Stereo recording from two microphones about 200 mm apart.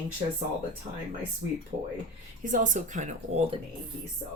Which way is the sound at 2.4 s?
40° right (ahead or behind).